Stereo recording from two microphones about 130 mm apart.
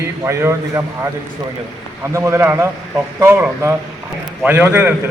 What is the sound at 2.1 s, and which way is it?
A man's voice, 20° right (ahead or behind).